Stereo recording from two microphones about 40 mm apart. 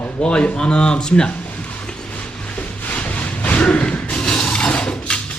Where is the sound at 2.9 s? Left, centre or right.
Left.